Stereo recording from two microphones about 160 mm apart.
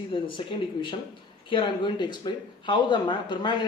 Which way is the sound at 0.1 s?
30° left (ahead or behind).